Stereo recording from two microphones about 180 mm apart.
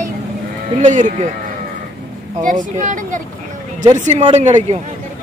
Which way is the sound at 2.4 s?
45° right (ahead or behind).